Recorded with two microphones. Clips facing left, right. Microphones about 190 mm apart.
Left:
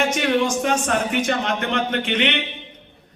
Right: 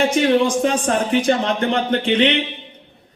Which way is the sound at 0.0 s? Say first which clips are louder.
Right 4 dB; 30° right (ahead or behind).